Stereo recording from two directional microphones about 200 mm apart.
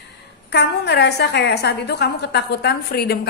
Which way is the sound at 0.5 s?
55° left (ahead or behind).